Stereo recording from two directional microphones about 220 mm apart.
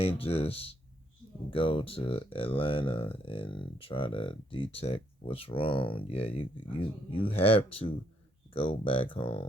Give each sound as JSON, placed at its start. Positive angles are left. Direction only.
{"t": 0.0, "sound": "speech", "side_deg": 25}